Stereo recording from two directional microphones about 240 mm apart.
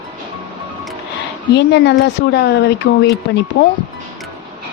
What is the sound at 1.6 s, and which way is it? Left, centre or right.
Speech, left.